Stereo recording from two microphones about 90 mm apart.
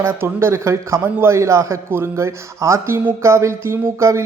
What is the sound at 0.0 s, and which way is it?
A man's voice, 30° right (ahead or behind).